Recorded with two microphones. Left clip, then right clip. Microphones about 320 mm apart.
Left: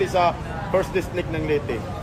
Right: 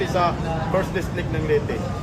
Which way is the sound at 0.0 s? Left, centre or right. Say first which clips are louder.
Left 1 dB; left.